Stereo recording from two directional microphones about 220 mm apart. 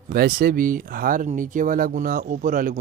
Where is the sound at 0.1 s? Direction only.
45° right (ahead or behind).